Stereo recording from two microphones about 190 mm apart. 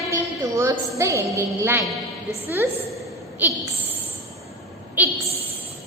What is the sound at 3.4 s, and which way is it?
Speech, 10° right (ahead or behind).